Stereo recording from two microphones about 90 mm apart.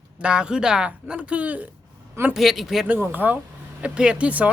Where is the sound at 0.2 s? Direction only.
10° right (ahead or behind).